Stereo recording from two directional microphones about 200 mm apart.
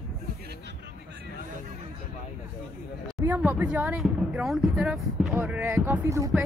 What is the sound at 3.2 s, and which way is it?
Speech, 10° right (ahead or behind).